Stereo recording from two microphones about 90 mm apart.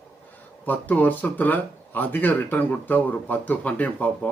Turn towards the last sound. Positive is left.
turn(degrees=15)  # may be behind; listen again after turning